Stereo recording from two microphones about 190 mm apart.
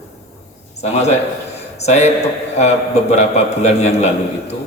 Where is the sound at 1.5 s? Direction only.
35° left (ahead or behind).